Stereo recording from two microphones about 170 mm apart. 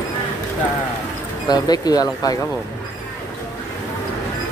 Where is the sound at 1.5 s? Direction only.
25° left (ahead or behind).